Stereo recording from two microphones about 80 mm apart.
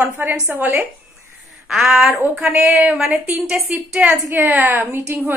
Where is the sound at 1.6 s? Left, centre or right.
Centre.